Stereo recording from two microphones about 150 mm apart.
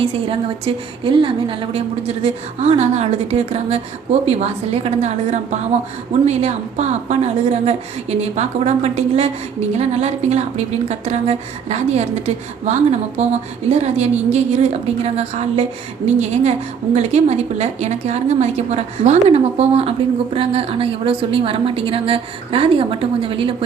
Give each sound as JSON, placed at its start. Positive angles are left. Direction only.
{"t": 0.0, "sound": "a woman's voice", "side_deg": -40}